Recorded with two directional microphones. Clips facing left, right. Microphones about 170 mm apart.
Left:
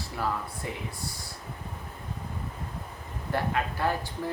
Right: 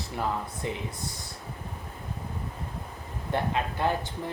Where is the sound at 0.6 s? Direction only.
20° right (ahead or behind).